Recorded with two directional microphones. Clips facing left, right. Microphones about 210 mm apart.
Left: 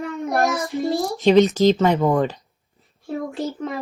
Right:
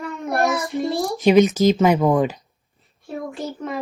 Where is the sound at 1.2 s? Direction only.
15° right (ahead or behind).